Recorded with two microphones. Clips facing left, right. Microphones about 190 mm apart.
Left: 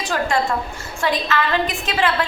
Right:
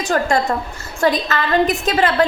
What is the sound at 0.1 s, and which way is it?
A woman's voice, 45° right (ahead or behind).